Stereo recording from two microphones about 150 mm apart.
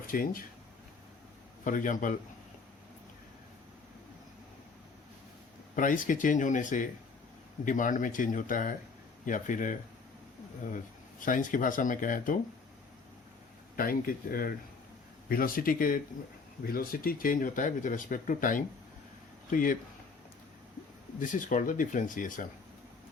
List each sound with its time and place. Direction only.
0.1 s speech: 70° left (ahead or behind)
1.6 s speech: 60° left (ahead or behind)
5.7 s speech: 60° left (ahead or behind)
11.2 s speech: 60° left (ahead or behind)
13.7 s speech: 70° left (ahead or behind)
16.6 s speech: 80° left; by 19.7 s 60° left (ahead or behind)
21.2 s speech: 60° left (ahead or behind)